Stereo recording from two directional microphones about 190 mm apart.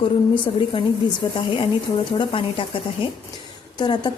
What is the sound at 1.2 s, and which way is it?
A woman's voice, 20° left (ahead or behind).